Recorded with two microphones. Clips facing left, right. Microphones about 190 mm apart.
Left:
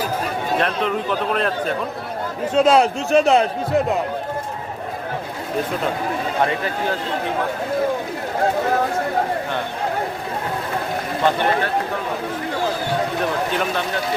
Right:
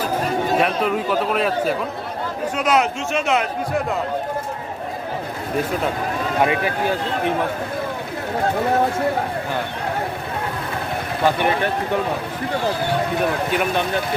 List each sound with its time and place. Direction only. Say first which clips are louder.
0.6 s a man's voice: right 2 dB; 5° right (ahead or behind)
2.6 s speech: left 5 dB; 30° left (ahead or behind)
11.3 s speech: even; 15° right (ahead or behind)
13.6 s speech: right 2 dB; 15° right (ahead or behind)